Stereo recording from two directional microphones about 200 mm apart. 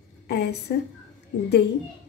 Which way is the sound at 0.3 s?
55° left (ahead or behind).